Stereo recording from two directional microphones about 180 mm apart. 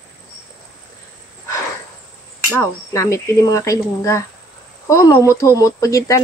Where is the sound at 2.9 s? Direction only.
15° left (ahead or behind).